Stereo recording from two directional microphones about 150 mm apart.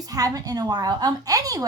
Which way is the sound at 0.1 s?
25° right (ahead or behind).